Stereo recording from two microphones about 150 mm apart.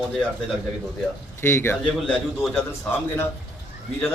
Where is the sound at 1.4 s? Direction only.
15° left (ahead or behind).